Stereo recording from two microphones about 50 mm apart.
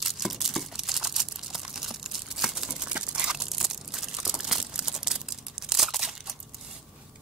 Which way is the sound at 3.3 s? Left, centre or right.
Centre.